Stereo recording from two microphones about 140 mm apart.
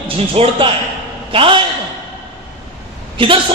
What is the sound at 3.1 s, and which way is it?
Speech, 35° right (ahead or behind).